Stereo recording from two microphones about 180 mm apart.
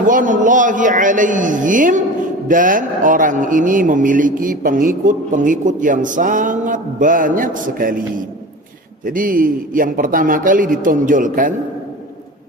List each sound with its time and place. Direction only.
0.1 s a man's voice: 45° right (ahead or behind)